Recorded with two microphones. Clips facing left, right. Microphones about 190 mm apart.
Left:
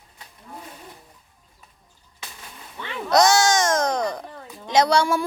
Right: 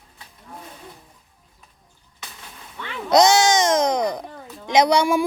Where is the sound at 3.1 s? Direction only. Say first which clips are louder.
Right 2 dB; 20° right (ahead or behind).